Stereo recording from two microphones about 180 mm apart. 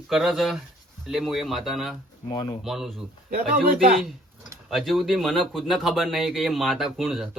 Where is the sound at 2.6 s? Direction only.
Centre (ahead or behind).